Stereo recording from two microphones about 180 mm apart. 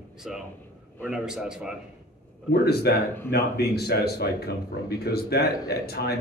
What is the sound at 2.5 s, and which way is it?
Speech, 60° left (ahead or behind).